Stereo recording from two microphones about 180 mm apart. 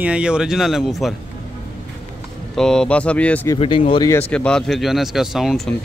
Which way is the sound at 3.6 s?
30° left (ahead or behind).